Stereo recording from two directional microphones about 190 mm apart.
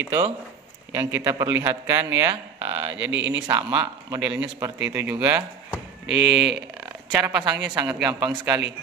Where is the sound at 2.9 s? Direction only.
75° right (ahead or behind).